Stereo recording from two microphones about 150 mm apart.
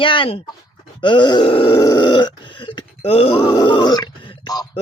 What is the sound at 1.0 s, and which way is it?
Groan, 30° left (ahead or behind).